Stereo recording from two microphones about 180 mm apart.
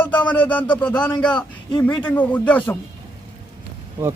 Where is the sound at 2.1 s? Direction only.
10° left (ahead or behind).